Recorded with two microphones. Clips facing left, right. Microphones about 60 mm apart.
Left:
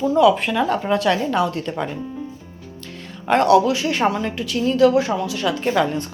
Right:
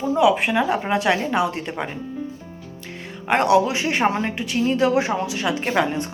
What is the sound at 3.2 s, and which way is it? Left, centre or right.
A woman's voice, right.